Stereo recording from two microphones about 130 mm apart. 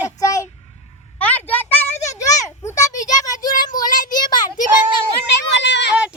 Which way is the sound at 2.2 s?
25° left (ahead or behind).